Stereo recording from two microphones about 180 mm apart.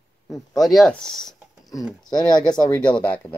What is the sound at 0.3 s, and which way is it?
Speech, centre (ahead or behind).